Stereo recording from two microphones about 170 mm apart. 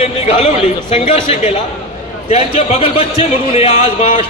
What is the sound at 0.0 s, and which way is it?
A man's voice, 35° left (ahead or behind).